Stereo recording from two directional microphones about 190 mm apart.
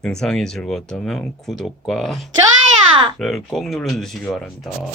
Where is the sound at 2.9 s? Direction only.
25° right (ahead or behind).